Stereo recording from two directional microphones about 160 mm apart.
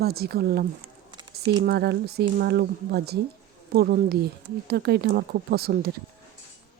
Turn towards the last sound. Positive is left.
turn(degrees=-75)  # may be behind; listen again after turning